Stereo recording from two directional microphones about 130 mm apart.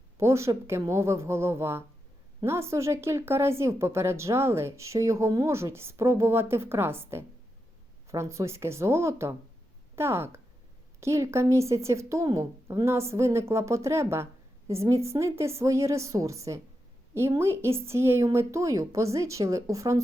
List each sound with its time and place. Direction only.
0.2 s speech: 20° right (ahead or behind)